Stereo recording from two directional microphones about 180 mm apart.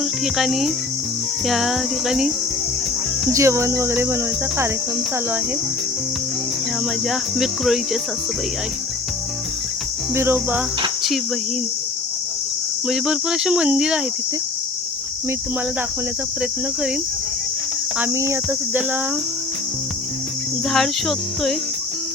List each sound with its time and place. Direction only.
0.3 s cricket: centre (ahead or behind)
3.2 s cricket: 15° right (ahead or behind)
7.1 s cricket: centre (ahead or behind)
10.2 s cricket: 10° right (ahead or behind)
12.9 s cricket: 5° right (ahead or behind)
17.9 s cricket: 15° right (ahead or behind)
20.7 s cricket: centre (ahead or behind)